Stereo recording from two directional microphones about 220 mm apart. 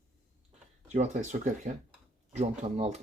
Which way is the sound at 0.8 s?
30° right (ahead or behind).